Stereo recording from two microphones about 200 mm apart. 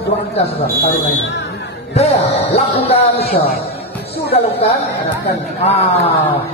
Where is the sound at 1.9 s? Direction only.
30° left (ahead or behind).